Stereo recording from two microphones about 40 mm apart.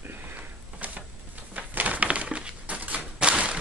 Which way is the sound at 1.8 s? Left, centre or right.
Right.